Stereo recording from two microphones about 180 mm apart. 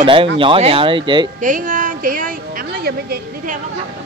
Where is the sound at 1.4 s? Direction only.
45° right (ahead or behind).